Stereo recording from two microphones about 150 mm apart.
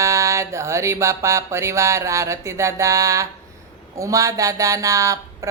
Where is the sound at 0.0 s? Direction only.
20° right (ahead or behind).